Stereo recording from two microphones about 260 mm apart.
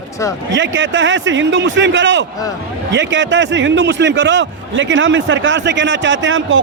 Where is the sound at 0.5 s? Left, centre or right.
Right.